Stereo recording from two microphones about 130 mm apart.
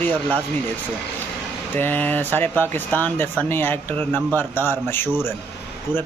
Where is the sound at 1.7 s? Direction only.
15° left (ahead or behind).